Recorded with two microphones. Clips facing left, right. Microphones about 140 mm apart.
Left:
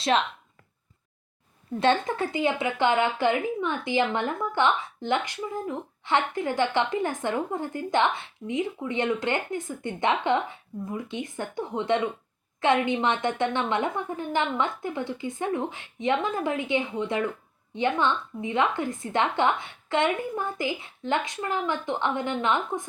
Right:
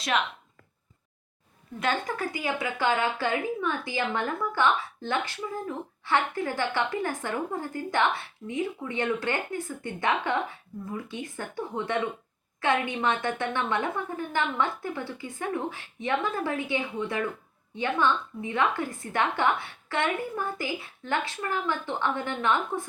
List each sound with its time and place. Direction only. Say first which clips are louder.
1.8 s speech: left 5 dB; 25° left (ahead or behind)